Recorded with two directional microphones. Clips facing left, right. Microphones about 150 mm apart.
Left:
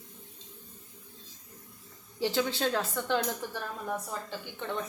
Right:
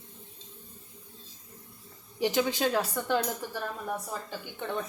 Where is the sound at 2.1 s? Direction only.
15° right (ahead or behind).